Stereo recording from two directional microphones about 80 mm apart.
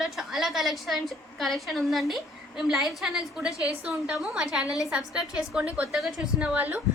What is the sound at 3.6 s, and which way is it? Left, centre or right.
Speech, centre.